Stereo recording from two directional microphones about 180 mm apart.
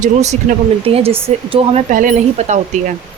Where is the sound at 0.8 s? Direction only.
30° right (ahead or behind).